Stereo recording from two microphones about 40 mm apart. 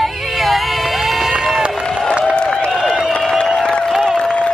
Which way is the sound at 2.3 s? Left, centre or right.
Left.